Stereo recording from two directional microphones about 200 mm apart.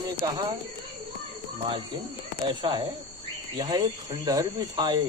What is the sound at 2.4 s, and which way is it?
Speech, 25° right (ahead or behind).